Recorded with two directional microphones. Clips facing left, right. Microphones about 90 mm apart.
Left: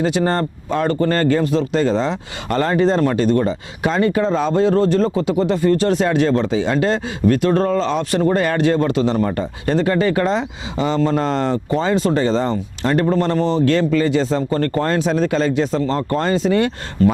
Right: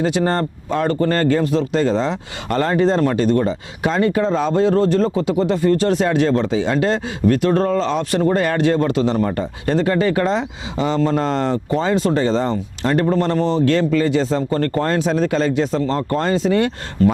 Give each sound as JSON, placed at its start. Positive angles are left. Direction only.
{"t": 0.0, "sound": "speech", "side_deg": 15}